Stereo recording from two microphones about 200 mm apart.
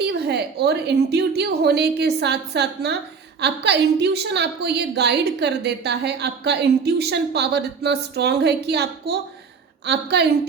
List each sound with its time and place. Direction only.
0.0 s a woman's voice: 55° right (ahead or behind)